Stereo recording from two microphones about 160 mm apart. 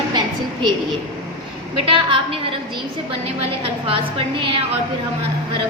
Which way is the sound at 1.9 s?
30° right (ahead or behind).